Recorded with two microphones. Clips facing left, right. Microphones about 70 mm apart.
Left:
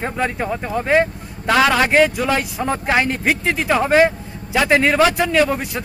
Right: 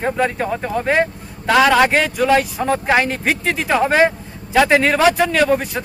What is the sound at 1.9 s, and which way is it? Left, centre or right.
Speech, centre.